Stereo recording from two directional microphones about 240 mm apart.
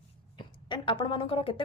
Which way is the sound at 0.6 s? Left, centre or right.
Centre.